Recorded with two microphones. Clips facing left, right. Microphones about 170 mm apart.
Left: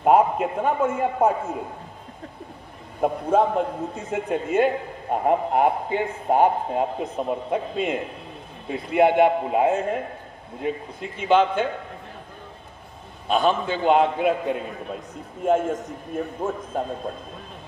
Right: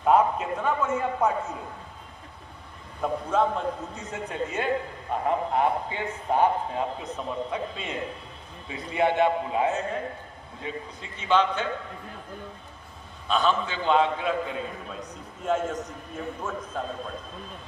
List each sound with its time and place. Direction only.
0.0 s a man's voice: 55° left (ahead or behind)
3.0 s a man's voice: 50° left (ahead or behind)
13.3 s a man's voice: 50° left (ahead or behind)